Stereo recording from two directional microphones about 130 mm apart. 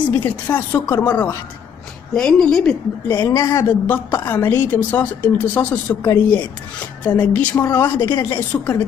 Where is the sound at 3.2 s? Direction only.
25° left (ahead or behind).